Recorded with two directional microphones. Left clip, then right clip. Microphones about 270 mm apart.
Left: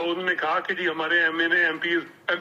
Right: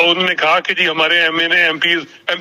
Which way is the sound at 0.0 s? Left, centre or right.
Right.